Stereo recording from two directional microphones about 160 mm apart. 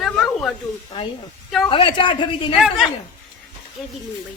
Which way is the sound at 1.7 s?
35° left (ahead or behind).